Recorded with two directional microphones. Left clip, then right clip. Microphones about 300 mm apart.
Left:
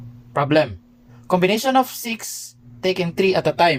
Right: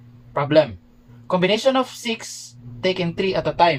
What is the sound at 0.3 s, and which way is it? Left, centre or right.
A man's voice, left.